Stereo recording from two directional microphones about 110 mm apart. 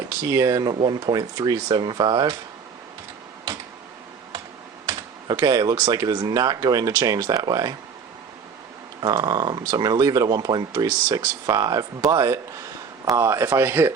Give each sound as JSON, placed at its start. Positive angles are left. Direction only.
{"t": 0.3, "sound": "speech", "side_deg": -30}
{"t": 0.7, "sound": "speech", "side_deg": -45}
{"t": 1.6, "sound": "speech", "side_deg": -45}
{"t": 4.9, "sound": "a sound", "side_deg": -35}
{"t": 6.1, "sound": "speech", "side_deg": -40}
{"t": 9.0, "sound": "speech", "side_deg": -40}